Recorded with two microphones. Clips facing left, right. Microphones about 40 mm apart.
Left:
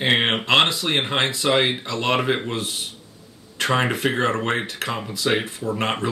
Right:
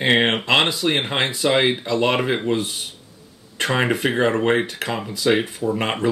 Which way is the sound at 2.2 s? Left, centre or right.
Centre.